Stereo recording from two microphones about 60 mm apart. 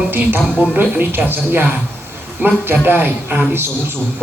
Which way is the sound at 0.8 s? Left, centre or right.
Right.